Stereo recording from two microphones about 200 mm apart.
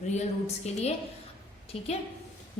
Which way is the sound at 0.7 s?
35° left (ahead or behind).